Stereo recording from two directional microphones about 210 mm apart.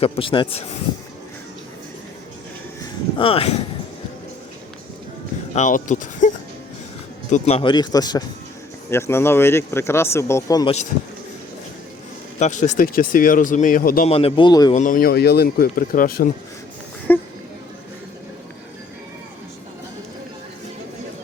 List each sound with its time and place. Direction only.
0.0 s a man's voice: 25° left (ahead or behind)
3.2 s a man's voice: 25° left (ahead or behind)
5.5 s a man's voice: 35° left (ahead or behind); by 10.8 s 20° left (ahead or behind)
12.4 s speech: 35° left (ahead or behind)
14.1 s a man's voice: 25° left (ahead or behind)
14.7 s speech: 35° left (ahead or behind)
17.1 s speech: 10° left (ahead or behind)